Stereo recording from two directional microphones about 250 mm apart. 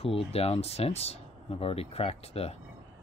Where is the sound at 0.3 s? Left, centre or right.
Left.